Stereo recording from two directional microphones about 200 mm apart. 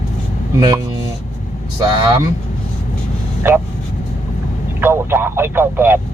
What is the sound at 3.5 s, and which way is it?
Speech, 10° right (ahead or behind).